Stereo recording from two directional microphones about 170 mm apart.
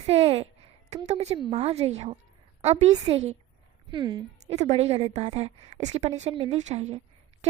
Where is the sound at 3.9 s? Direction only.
25° right (ahead or behind).